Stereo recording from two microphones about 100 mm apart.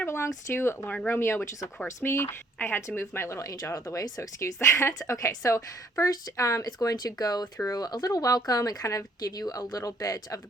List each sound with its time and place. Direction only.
0.0 s speech: 25° left (ahead or behind)
0.9 s speech: 15° left (ahead or behind); by 10.4 s 35° left (ahead or behind)